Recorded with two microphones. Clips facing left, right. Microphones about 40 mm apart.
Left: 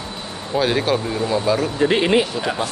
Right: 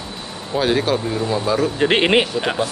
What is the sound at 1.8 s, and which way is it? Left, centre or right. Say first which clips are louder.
Speech: right 1 dB; right.